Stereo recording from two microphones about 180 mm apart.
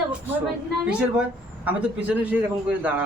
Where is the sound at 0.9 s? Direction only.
5° right (ahead or behind).